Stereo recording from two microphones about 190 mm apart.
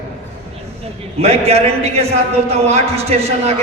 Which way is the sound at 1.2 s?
35° right (ahead or behind).